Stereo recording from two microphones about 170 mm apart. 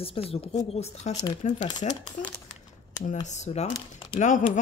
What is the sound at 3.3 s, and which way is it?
Speech, 40° left (ahead or behind).